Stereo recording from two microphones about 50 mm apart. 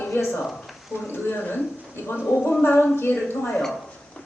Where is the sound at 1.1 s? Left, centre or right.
Left.